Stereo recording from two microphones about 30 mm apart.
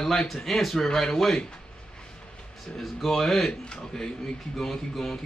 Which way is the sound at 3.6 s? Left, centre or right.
Left.